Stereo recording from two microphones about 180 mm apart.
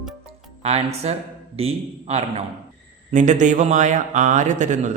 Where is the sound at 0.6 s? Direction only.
35° right (ahead or behind).